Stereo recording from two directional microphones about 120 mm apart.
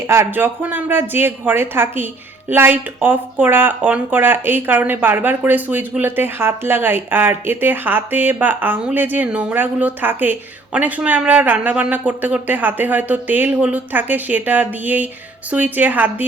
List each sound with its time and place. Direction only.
0.1 s speech: 20° right (ahead or behind)